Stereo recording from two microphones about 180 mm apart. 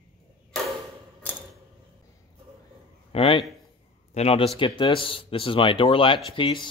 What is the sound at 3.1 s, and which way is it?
A man's voice, 30° left (ahead or behind).